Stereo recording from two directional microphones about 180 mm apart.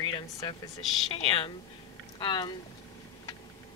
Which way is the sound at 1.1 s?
30° left (ahead or behind).